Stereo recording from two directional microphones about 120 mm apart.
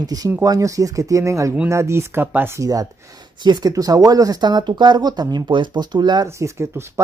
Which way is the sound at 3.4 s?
35° right (ahead or behind).